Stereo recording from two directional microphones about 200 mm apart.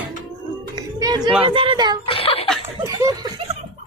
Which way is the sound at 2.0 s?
30° left (ahead or behind).